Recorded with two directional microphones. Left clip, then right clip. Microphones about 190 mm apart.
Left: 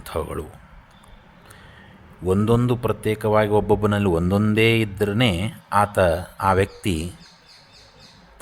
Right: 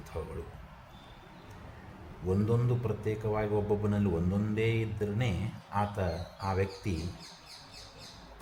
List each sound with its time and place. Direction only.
0.1 s a man's voice: 55° left (ahead or behind)
2.5 s a man's voice: 40° left (ahead or behind)